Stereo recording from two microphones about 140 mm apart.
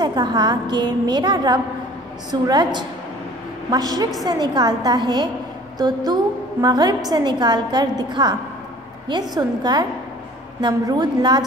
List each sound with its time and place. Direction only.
0.0 s a woman's voice: 30° right (ahead or behind)